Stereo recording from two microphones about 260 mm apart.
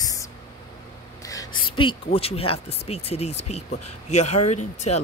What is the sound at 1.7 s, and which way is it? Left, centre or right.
Speech, left.